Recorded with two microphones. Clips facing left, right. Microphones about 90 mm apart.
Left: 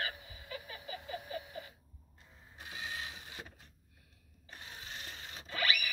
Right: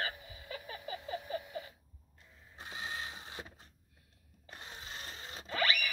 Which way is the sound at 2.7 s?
30° right (ahead or behind).